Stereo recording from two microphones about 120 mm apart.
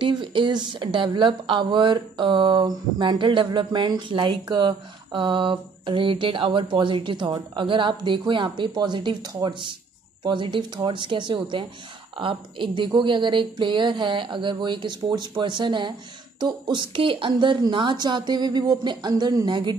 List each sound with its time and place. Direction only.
0.0 s speech: 40° right (ahead or behind)